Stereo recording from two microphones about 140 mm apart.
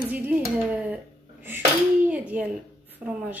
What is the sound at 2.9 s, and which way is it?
Speech, 10° right (ahead or behind).